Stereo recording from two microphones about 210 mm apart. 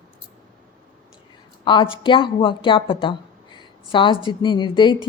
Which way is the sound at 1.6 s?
20° left (ahead or behind).